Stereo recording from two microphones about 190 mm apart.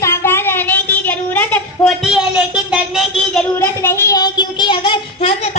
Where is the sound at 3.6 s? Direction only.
15° left (ahead or behind).